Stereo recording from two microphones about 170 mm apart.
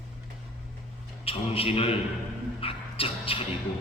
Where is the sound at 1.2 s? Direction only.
35° left (ahead or behind).